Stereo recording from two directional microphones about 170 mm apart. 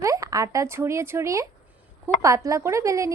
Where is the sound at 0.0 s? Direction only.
20° right (ahead or behind).